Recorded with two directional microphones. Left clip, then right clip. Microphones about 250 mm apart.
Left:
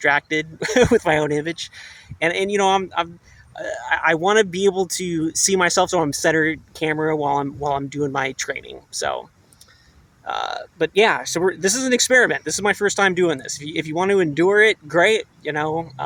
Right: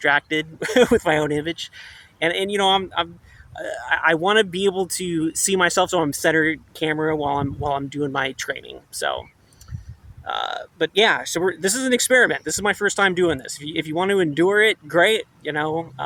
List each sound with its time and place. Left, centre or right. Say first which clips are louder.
0.0 s speech: left 1 dB; centre
1.5 s speech: left 1 dB; left
2.1 s speech: left 2 dB; centre
10.2 s speech: left 1 dB; centre